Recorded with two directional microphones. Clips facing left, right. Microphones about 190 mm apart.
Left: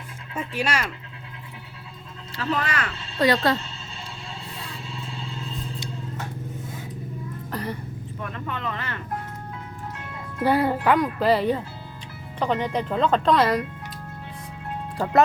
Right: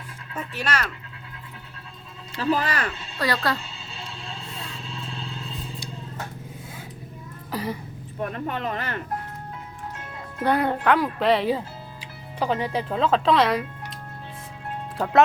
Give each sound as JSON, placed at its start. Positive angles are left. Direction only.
{"t": 0.3, "sound": "speech", "side_deg": 10}
{"t": 2.6, "sound": "speech", "side_deg": -35}
{"t": 3.2, "sound": "speech", "side_deg": 25}
{"t": 7.5, "sound": "a sound", "side_deg": -5}
{"t": 8.2, "sound": "speech", "side_deg": -40}
{"t": 10.4, "sound": "speech", "side_deg": 5}
{"t": 14.9, "sound": "speech", "side_deg": 0}